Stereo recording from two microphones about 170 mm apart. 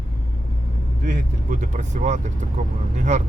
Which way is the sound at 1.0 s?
50° right (ahead or behind).